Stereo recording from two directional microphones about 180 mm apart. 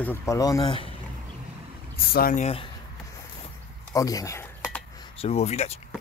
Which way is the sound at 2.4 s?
30° left (ahead or behind).